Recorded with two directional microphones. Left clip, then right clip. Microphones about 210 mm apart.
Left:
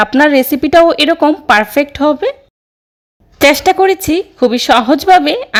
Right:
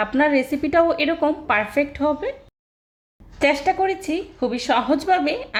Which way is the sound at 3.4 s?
50° left (ahead or behind).